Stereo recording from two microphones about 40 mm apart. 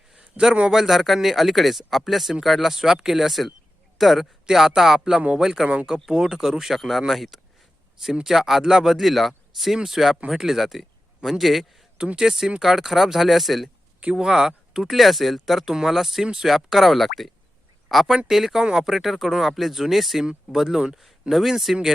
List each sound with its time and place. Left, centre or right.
0.7 s speech: centre
4.4 s speech: centre
6.7 s speech: centre
9.0 s speech: centre
10.5 s speech: centre
11.9 s speech: right
12.2 s speech: centre